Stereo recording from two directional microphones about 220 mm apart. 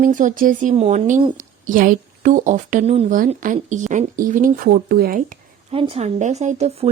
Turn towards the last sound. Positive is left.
turn(degrees=-30)  # may be behind; listen again after turning